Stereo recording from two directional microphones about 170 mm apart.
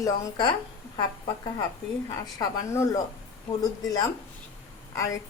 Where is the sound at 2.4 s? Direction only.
20° left (ahead or behind).